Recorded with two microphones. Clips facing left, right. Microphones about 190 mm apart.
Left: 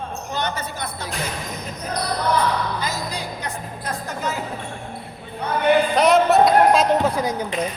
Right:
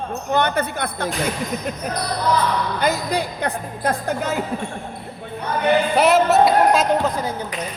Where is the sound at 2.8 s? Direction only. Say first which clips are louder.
Right 7 dB; 60° right (ahead or behind).